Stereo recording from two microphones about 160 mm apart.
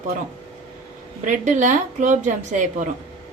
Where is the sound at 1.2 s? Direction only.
50° right (ahead or behind).